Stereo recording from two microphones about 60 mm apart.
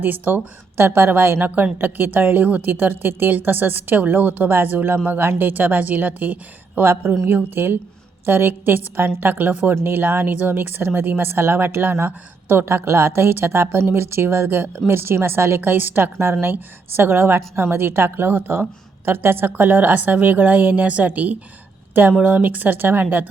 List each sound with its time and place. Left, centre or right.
0.0 s speech: right